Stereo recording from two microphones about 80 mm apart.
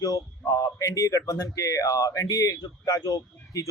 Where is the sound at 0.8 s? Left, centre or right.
Left.